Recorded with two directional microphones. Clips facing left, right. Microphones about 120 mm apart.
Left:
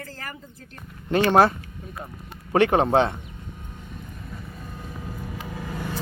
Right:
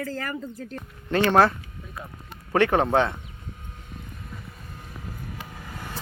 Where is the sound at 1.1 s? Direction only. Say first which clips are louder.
Left 1 dB; 15° left (ahead or behind).